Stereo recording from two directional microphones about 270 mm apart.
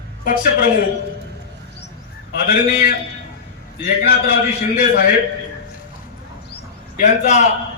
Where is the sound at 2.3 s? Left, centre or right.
Left.